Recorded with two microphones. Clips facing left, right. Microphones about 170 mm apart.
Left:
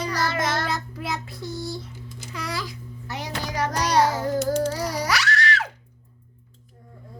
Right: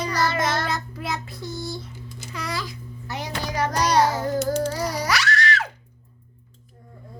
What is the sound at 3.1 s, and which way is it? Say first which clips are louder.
Speech: right 1 dB; 30° right (ahead or behind).